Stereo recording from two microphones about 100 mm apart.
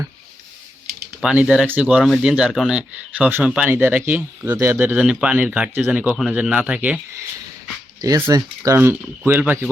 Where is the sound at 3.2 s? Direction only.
20° right (ahead or behind).